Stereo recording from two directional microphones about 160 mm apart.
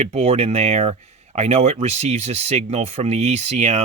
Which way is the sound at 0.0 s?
40° right (ahead or behind).